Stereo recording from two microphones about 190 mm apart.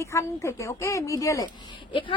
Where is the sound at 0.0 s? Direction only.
15° left (ahead or behind).